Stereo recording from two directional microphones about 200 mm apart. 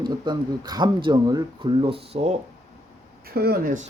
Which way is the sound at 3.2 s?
50° right (ahead or behind).